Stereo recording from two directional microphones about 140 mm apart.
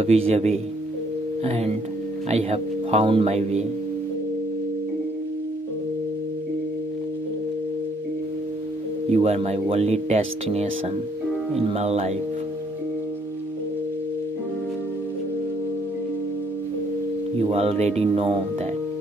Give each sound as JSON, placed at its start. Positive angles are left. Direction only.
{"t": 0.0, "sound": "speech", "side_deg": -50}
{"t": 9.1, "sound": "speech", "side_deg": -50}
{"t": 17.4, "sound": "speech", "side_deg": -45}